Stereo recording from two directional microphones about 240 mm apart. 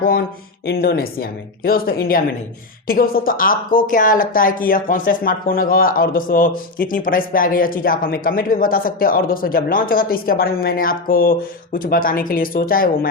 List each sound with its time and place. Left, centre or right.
0.6 s speech: left